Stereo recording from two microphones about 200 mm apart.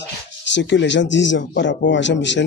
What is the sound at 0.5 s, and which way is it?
A man's voice, 65° left (ahead or behind).